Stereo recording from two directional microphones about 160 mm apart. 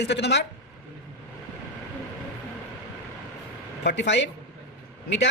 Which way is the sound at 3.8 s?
90° left.